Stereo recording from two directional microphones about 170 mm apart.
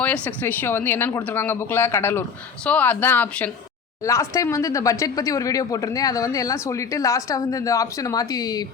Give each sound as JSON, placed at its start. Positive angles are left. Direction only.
{"t": 0.0, "sound": "speech", "side_deg": 10}